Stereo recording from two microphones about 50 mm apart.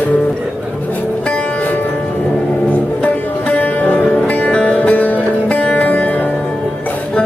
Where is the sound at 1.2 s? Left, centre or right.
Left.